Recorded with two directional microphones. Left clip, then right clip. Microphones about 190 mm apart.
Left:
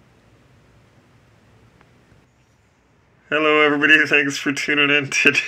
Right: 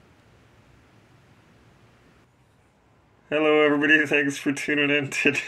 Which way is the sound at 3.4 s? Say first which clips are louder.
Left 4 dB; 35° left (ahead or behind).